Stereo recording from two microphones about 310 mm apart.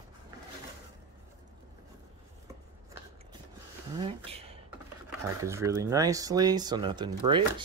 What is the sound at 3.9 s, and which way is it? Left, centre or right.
Speech, centre.